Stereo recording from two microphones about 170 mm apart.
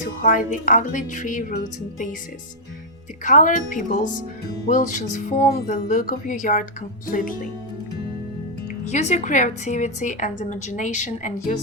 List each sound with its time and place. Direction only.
0.2 s a woman's voice: 50° left (ahead or behind)
3.2 s a woman's voice: 50° left (ahead or behind)
8.9 s a woman's voice: 45° left (ahead or behind)